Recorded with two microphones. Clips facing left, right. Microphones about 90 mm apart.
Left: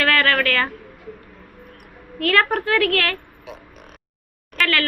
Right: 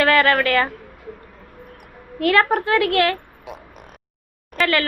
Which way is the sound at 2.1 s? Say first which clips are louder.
Right 2 dB; 20° right (ahead or behind).